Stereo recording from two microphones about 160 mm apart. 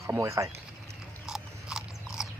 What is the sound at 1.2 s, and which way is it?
Biting, 5° right (ahead or behind).